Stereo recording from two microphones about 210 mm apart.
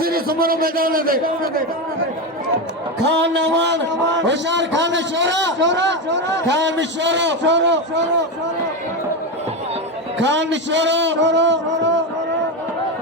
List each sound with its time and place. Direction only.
0.0 s a man's voice: 45° right (ahead or behind)
3.1 s a man's voice: 55° right (ahead or behind)
10.2 s a man's voice: 60° right (ahead or behind)